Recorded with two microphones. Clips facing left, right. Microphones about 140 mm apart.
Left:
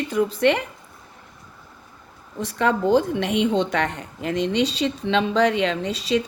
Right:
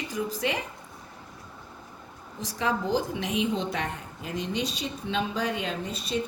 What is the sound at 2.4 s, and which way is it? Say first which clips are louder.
A woman's voice: left 7 dB; 65° left (ahead or behind).